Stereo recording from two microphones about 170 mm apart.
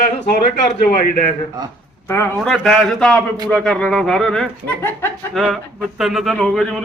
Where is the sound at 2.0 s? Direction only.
15° left (ahead or behind).